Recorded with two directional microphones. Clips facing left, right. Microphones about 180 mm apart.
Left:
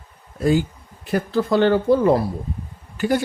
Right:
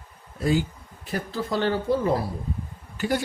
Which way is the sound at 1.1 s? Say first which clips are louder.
Left 8 dB; 65° left (ahead or behind).